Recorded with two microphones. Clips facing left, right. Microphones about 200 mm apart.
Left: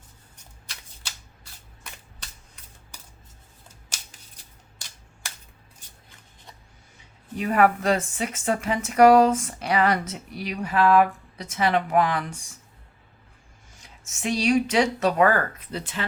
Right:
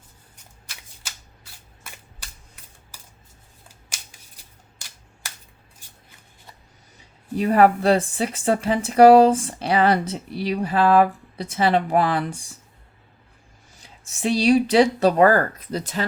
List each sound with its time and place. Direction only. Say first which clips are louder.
7.3 s speech: right 4 dB; 35° right (ahead or behind)
14.0 s speech: right 5 dB; 35° right (ahead or behind)